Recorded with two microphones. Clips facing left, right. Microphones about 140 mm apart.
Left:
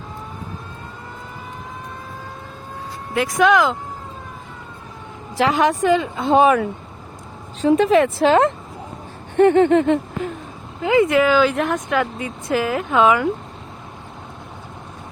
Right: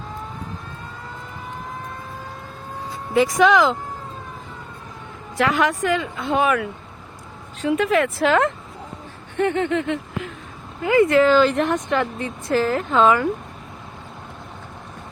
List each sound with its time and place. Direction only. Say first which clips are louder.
3.2 s speech: even; centre (ahead or behind)
5.4 s a woman's voice: left 3 dB; 25° left (ahead or behind)
9.4 s a sound: left 8 dB; 40° left (ahead or behind)
10.8 s speech: even; 20° left (ahead or behind)